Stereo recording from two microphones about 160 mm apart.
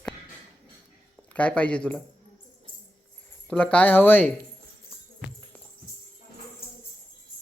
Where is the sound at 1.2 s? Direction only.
10° left (ahead or behind).